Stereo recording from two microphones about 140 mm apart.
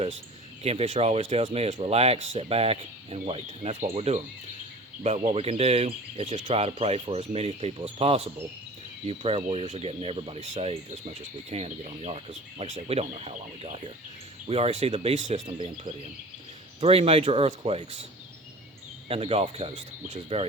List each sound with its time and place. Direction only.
0.6 s speech: 45° right (ahead or behind)
19.0 s speech: 45° right (ahead or behind)